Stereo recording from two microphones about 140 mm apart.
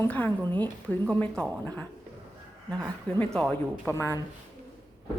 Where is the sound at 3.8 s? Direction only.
15° left (ahead or behind).